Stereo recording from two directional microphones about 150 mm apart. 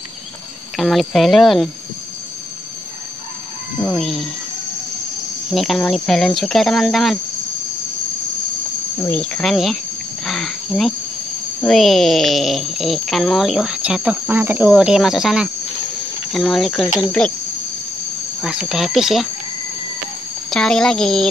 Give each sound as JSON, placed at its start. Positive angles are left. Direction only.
{"t": 0.7, "sound": "speech", "side_deg": 0}
{"t": 3.8, "sound": "speech", "side_deg": 5}
{"t": 5.5, "sound": "speech", "side_deg": 0}
{"t": 9.0, "sound": "speech", "side_deg": 10}
{"t": 10.2, "sound": "a sound", "side_deg": 5}
{"t": 11.6, "sound": "speech", "side_deg": 0}
{"t": 18.4, "sound": "speech", "side_deg": -5}
{"t": 20.4, "sound": "speech", "side_deg": 5}